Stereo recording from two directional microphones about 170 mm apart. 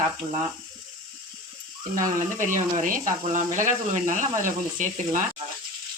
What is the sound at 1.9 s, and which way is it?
Speech, 50° right (ahead or behind).